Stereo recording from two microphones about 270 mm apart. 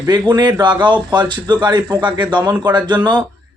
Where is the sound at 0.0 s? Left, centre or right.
Centre.